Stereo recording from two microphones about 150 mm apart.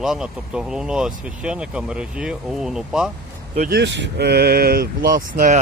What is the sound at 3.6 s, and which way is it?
Speech, 90° right.